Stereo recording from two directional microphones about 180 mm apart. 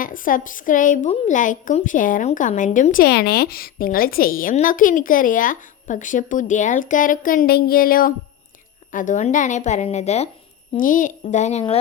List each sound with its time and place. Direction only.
0.0 s a woman's voice: 50° left (ahead or behind)
10.8 s a woman's voice: 50° left (ahead or behind)